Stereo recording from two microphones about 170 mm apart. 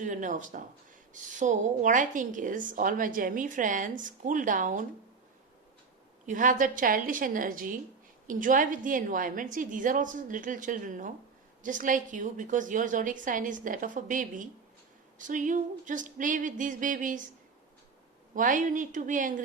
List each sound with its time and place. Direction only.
0.0 s a woman's voice: 50° right (ahead or behind)
6.2 s a woman's voice: 50° right (ahead or behind)
18.3 s a woman's voice: 50° right (ahead or behind)